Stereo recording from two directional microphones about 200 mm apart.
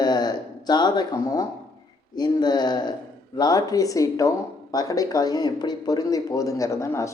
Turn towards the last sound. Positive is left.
turn(degrees=15)  # may be behind; listen again after turning